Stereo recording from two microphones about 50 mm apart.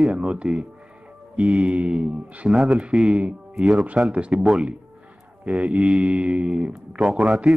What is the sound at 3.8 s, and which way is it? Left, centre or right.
Speech, right.